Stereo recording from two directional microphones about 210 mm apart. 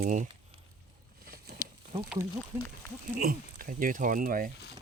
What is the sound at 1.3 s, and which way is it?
Patter, 45° right (ahead or behind).